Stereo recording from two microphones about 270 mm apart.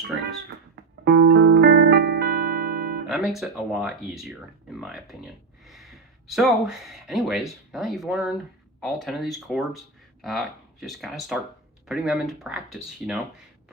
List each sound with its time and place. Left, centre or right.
1.0 s music: right
3.1 s speech: centre